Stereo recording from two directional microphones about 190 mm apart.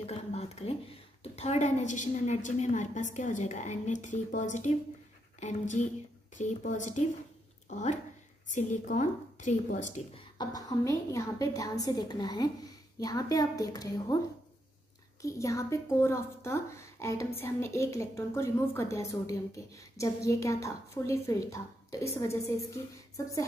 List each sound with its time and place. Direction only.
0.0 s a woman's voice: 35° left (ahead or behind)
10.3 s a woman's voice: 20° left (ahead or behind)
15.2 s a woman's voice: 15° left (ahead or behind)